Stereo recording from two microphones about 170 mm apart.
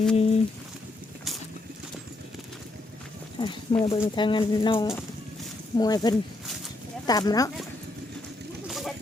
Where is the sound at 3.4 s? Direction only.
30° left (ahead or behind).